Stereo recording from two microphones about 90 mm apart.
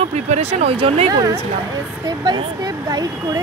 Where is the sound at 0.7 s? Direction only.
90° right.